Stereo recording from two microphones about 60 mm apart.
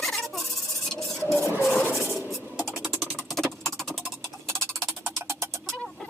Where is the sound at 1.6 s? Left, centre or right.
Centre.